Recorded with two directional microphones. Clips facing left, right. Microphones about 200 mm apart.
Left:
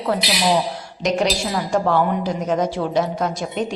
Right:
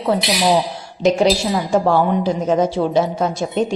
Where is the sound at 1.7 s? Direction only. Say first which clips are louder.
Right 3 dB; 30° right (ahead or behind).